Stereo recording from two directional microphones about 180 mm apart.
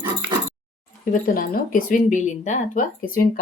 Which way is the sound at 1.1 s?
50° left (ahead or behind).